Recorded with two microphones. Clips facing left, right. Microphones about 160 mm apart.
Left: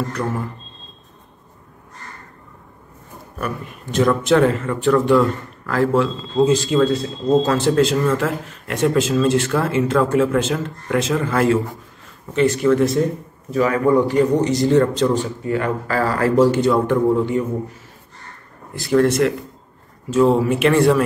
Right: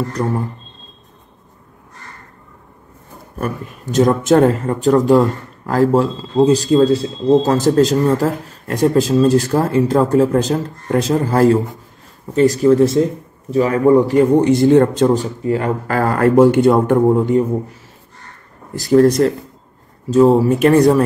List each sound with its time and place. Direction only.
0.2 s speech: 30° right (ahead or behind)
3.3 s a man's voice: 40° right (ahead or behind)
15.4 s speech: 35° right (ahead or behind)
15.9 s a man's voice: 55° right (ahead or behind)
18.8 s speech: 40° right (ahead or behind)